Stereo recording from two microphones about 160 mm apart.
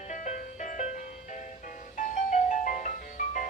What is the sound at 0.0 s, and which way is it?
Music, 55° left (ahead or behind).